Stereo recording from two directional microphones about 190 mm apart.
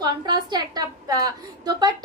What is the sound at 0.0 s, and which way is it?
A woman's voice, 20° right (ahead or behind).